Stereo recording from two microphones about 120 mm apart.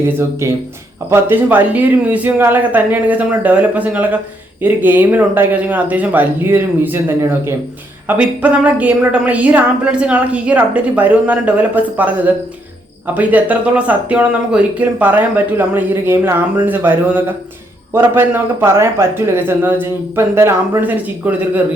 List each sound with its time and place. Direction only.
0.1 s a man's voice: 20° right (ahead or behind)